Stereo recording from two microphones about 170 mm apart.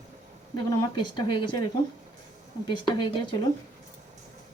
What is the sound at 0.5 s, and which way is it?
Speech, 25° left (ahead or behind).